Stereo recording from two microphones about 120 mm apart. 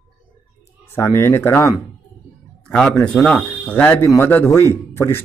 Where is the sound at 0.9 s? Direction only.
25° left (ahead or behind).